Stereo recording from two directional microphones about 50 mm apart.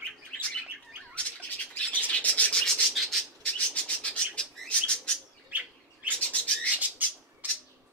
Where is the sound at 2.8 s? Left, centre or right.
Centre.